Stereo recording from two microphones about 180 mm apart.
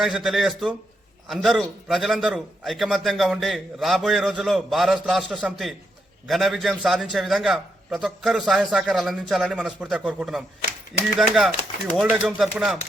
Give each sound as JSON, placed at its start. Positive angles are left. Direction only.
{"t": 0.0, "sound": "a man's voice", "side_deg": 0}